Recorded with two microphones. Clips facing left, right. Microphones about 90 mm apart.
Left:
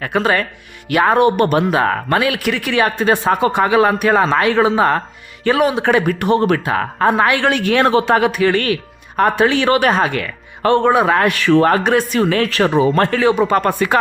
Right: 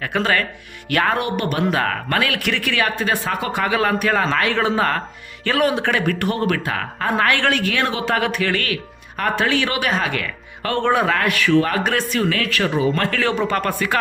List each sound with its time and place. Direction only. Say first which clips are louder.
0.1 s speech: left 4 dB; 15° left (ahead or behind)
1.1 s speech: left 9 dB; 30° left (ahead or behind)
7.2 s speech: left 4 dB; 15° left (ahead or behind)
7.7 s speech: left 9 dB; 35° left (ahead or behind)
8.0 s speech: left 6 dB; 20° left (ahead or behind)
9.6 s speech: left 8 dB; 40° left (ahead or behind)
10.1 s speech: left 3 dB; 25° left (ahead or behind)
10.8 s speech: left 3 dB; 15° left (ahead or behind)
11.1 s speech: left 4 dB; 30° left (ahead or behind)
11.8 s speech: left 5 dB; 25° left (ahead or behind)
13.1 s speech: left 6 dB; 15° left (ahead or behind)